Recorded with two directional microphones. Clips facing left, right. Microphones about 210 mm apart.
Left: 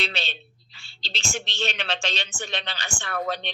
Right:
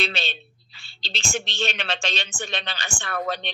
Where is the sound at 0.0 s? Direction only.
50° right (ahead or behind).